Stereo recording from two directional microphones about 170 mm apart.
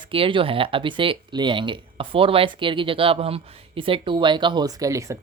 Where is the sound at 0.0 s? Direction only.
30° right (ahead or behind).